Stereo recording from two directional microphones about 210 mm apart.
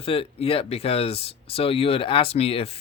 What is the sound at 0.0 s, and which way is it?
Speech, 25° left (ahead or behind).